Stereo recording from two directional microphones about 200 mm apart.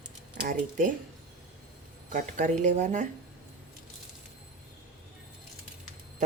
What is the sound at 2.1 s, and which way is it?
A woman's voice, 40° right (ahead or behind).